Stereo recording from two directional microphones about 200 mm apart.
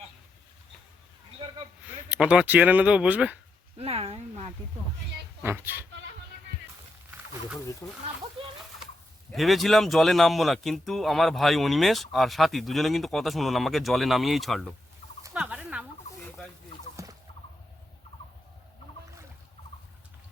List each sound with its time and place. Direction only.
2.0 s speech: 5° right (ahead or behind)
3.8 s speech: 30° right (ahead or behind)
5.4 s speech: 10° right (ahead or behind)
7.8 s speech: 15° left (ahead or behind)
8.4 s speech: 25° right (ahead or behind)
9.3 s speech: centre (ahead or behind)
15.3 s fowl: 5° right (ahead or behind)